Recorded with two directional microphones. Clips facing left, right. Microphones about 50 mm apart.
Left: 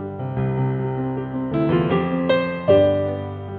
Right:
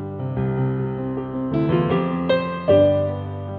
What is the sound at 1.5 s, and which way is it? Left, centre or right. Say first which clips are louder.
Music: left 1 dB; centre.